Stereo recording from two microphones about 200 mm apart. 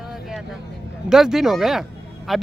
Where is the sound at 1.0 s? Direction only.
Centre (ahead or behind).